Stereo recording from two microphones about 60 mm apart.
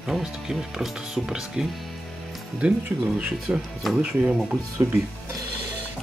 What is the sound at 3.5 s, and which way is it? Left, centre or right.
Speech, right.